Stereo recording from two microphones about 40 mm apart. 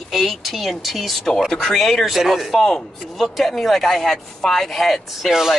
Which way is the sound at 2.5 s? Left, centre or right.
Centre.